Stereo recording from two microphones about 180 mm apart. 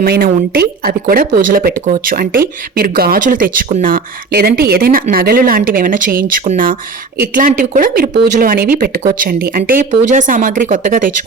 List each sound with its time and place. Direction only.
0.0 s speech: 60° right (ahead or behind)